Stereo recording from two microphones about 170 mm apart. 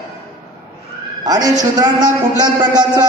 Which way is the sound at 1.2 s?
20° right (ahead or behind).